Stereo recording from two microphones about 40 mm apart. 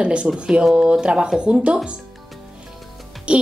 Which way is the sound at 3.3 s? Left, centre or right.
Right.